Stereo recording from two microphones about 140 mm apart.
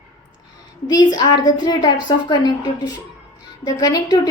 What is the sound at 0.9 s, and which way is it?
A woman's voice, 30° left (ahead or behind).